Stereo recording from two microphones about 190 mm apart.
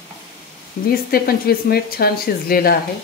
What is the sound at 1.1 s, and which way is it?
Speech, 55° left (ahead or behind).